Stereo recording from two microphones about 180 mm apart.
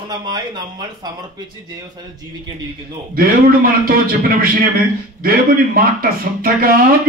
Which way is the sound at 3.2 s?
55° right (ahead or behind).